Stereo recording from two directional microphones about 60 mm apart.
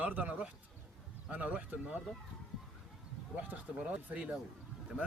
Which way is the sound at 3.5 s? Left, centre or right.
Right.